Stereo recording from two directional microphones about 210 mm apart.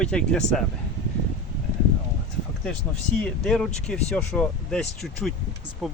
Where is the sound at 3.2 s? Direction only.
5° left (ahead or behind).